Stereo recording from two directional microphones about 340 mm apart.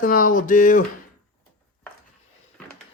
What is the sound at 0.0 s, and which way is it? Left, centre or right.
Speech, left.